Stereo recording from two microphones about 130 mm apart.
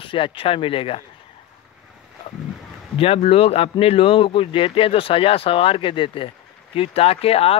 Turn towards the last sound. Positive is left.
turn(degrees=50)  # may be behind; listen again after turning